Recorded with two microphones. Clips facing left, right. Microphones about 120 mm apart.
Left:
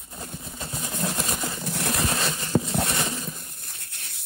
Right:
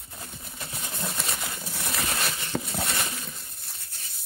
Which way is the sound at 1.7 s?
65° left (ahead or behind).